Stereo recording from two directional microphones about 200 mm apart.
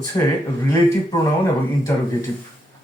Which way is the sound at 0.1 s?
15° left (ahead or behind).